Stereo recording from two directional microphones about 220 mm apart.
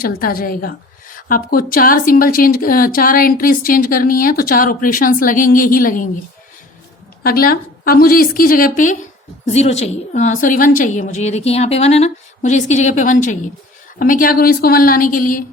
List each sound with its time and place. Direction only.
0.0 s speech: 40° left (ahead or behind)
7.2 s speech: 40° left (ahead or behind)